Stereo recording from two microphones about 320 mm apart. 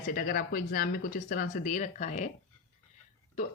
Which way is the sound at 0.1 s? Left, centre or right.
Left.